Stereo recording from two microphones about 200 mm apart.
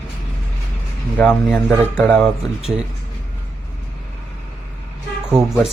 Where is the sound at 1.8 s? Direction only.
10° left (ahead or behind).